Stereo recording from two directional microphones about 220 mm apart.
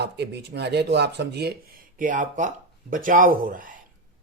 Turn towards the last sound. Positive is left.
turn(degrees=-40)  # may be behind; listen again after turning